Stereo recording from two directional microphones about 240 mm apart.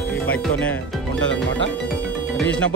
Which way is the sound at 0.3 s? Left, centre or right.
Centre.